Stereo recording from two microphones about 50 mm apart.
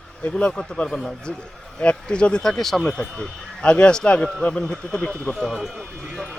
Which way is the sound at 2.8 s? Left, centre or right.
Centre.